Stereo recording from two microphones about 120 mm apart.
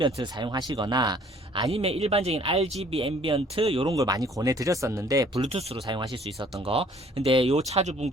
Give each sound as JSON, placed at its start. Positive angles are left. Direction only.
{"t": 0.0, "sound": "speech", "side_deg": -40}
{"t": 1.7, "sound": "speech", "side_deg": -55}
{"t": 3.9, "sound": "speech", "side_deg": -30}
{"t": 5.5, "sound": "speech", "side_deg": -55}
{"t": 5.8, "sound": "speech", "side_deg": -40}
{"t": 6.6, "sound": "speech", "side_deg": -50}